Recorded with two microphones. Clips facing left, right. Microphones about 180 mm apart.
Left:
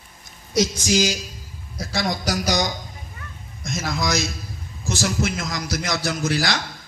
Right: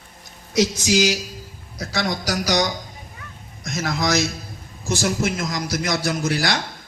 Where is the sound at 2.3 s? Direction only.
60° right (ahead or behind).